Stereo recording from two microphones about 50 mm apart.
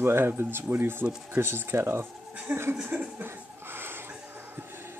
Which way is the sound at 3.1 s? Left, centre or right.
Right.